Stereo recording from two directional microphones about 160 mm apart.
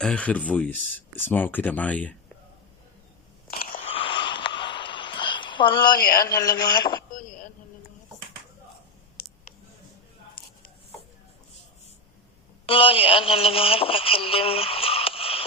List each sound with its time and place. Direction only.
0.0 s speech: 5° left (ahead or behind)
3.6 s biting: 65° left (ahead or behind)
3.8 s a sound: 35° left (ahead or behind)
12.6 s speech: 35° left (ahead or behind)